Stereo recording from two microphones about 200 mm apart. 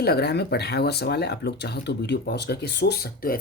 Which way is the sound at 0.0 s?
55° left (ahead or behind).